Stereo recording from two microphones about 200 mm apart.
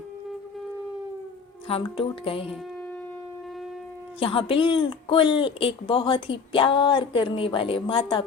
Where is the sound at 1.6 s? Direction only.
25° left (ahead or behind).